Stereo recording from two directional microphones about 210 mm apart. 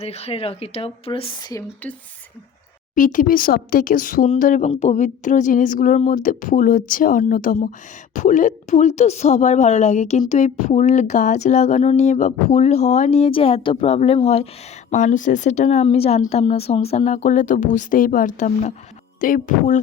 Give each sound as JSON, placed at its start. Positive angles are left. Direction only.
{"t": 0.0, "sound": "speech", "side_deg": 30}
{"t": 2.9, "sound": "a woman's voice", "side_deg": 40}